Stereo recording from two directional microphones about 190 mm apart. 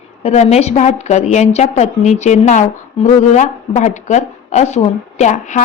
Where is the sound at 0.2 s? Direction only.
35° left (ahead or behind).